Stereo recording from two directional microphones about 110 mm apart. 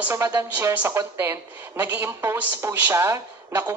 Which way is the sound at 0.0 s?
20° right (ahead or behind).